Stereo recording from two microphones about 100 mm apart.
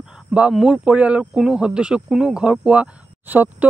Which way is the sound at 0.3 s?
10° right (ahead or behind).